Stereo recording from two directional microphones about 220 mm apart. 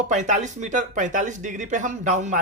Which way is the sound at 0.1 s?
35° right (ahead or behind).